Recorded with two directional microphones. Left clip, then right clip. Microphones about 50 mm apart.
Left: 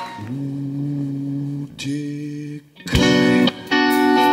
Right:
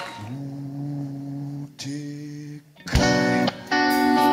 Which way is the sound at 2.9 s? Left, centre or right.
Left.